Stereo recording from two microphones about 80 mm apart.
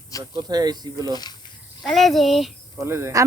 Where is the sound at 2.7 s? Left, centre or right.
Right.